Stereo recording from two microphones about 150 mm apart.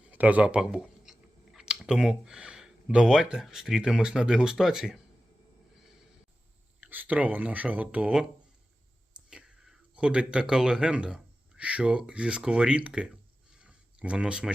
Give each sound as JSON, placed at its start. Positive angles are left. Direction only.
{"t": 0.1, "sound": "speech", "side_deg": -10}
{"t": 6.7, "sound": "speech", "side_deg": -10}
{"t": 9.3, "sound": "speech", "side_deg": -5}
{"t": 13.6, "sound": "a sound", "side_deg": -5}